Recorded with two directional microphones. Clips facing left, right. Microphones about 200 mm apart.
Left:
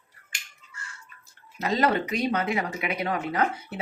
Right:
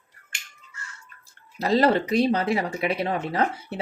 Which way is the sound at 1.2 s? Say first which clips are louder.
Right 3 dB; 35° right (ahead or behind).